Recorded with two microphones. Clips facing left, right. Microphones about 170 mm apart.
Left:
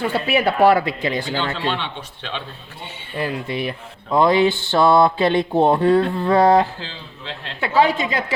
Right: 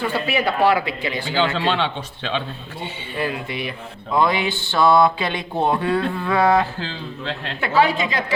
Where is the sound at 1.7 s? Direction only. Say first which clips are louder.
Right 5 dB; 90° right.